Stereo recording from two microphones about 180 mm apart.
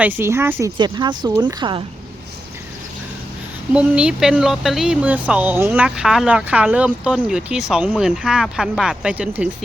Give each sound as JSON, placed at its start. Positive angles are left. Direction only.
{"t": 0.0, "sound": "speech", "side_deg": -10}
{"t": 0.8, "sound": "speech", "side_deg": -25}
{"t": 3.7, "sound": "speech", "side_deg": -5}